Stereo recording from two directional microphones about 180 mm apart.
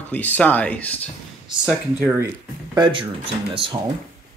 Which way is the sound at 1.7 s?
10° right (ahead or behind).